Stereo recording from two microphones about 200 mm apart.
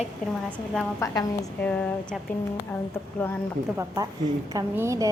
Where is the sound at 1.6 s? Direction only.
5° left (ahead or behind).